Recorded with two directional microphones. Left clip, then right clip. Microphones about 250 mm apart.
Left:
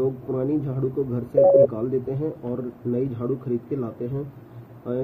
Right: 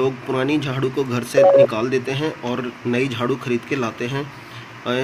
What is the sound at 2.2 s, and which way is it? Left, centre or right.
Speech, right.